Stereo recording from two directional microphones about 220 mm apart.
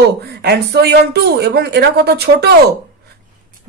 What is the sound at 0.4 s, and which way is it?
Speech, 50° right (ahead or behind).